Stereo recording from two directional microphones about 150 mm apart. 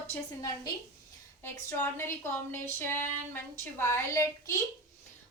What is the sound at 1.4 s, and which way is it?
A woman's voice, 20° left (ahead or behind).